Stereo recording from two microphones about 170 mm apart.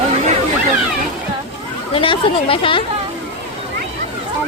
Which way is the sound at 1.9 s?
30° left (ahead or behind).